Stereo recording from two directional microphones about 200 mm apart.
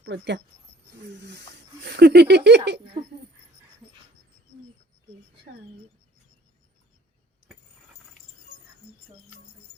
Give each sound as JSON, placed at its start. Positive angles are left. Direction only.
{"t": 0.0, "sound": "speech", "side_deg": -60}